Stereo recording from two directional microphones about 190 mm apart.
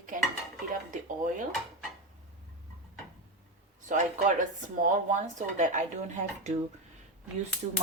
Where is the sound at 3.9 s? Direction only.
40° right (ahead or behind).